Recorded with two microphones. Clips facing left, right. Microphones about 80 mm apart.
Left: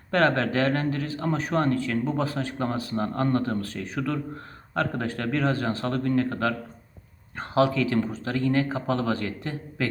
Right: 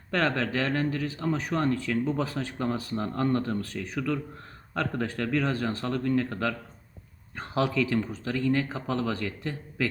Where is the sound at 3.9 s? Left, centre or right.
Left.